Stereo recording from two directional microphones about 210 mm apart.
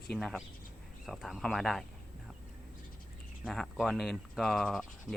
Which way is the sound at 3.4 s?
Centre (ahead or behind).